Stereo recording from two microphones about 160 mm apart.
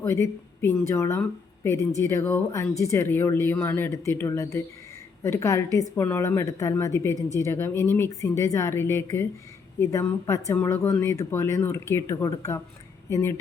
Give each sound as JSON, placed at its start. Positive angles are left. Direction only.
{"t": 0.0, "sound": "speech", "side_deg": 15}